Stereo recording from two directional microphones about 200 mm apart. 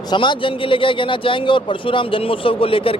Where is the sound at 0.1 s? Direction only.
25° left (ahead or behind).